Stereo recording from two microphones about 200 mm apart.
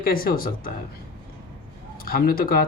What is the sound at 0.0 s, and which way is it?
Speech, 45° left (ahead or behind).